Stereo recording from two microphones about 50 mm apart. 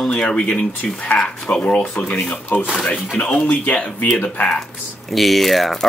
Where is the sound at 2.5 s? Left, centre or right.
Left.